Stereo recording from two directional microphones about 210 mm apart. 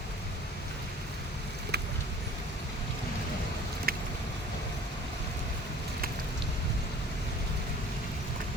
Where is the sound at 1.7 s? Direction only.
50° right (ahead or behind).